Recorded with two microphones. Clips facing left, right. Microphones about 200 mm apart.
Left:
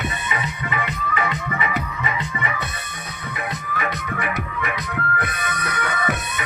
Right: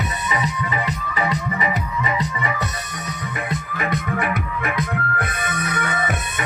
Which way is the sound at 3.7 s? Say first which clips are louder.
Right 4 dB; 50° right (ahead or behind).